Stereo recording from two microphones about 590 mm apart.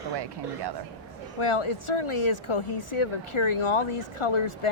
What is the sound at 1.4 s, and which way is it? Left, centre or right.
A woman's voice, left.